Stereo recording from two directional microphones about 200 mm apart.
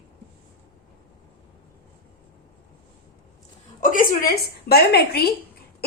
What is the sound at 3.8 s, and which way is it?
A woman's voice, 40° left (ahead or behind).